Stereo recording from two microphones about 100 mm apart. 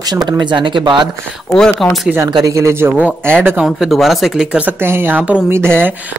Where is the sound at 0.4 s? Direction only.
50° right (ahead or behind).